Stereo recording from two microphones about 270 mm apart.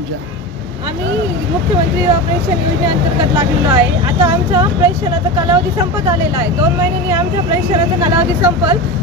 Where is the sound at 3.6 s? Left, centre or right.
Centre.